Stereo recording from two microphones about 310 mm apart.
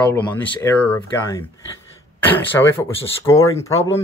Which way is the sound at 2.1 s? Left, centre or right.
Centre.